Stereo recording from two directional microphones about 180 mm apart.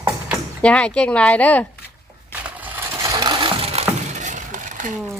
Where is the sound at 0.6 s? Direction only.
5° left (ahead or behind).